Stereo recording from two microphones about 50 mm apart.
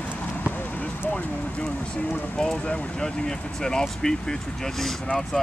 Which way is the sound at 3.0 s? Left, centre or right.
Centre.